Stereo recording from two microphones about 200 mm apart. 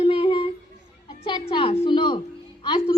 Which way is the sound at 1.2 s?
25° left (ahead or behind).